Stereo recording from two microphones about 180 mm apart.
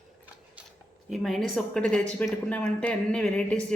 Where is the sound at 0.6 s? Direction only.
5° right (ahead or behind).